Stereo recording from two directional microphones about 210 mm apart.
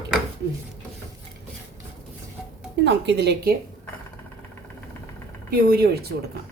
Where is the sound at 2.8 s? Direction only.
55° right (ahead or behind).